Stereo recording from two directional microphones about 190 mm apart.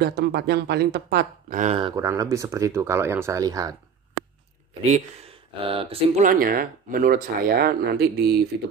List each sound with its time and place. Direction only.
0.0 s speech: 60° right (ahead or behind)
1.8 s speech: 20° right (ahead or behind)
4.8 s speech: 35° right (ahead or behind)
6.2 s speech: 50° right (ahead or behind)